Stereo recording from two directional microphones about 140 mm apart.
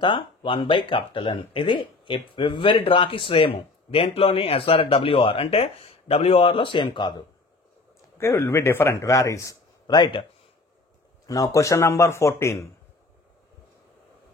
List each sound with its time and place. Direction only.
0.0 s speech: 35° left (ahead or behind)
8.2 s speech: 20° left (ahead or behind); by 10.2 s 35° left (ahead or behind)
11.2 s speech: 25° left (ahead or behind)